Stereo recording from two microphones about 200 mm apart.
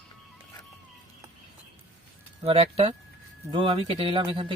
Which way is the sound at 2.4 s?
30° right (ahead or behind).